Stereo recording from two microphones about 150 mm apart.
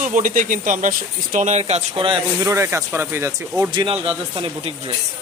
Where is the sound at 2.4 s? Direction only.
15° right (ahead or behind).